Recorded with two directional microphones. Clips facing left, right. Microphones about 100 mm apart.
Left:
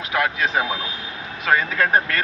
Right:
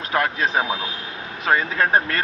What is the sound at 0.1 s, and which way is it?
A man's voice, 35° right (ahead or behind).